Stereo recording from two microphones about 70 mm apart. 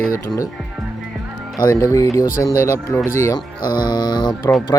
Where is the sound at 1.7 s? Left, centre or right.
Left.